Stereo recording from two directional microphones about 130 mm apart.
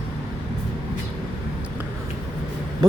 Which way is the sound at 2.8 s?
30° right (ahead or behind).